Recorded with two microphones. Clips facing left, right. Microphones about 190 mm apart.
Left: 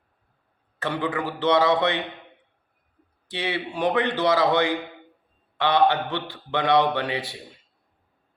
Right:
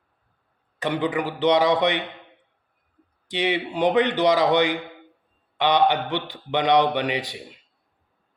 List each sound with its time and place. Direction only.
0.8 s a man's voice: 15° right (ahead or behind)
3.2 s a man's voice: 15° right (ahead or behind)